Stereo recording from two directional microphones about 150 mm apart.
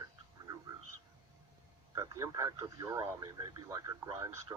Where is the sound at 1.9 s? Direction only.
20° right (ahead or behind).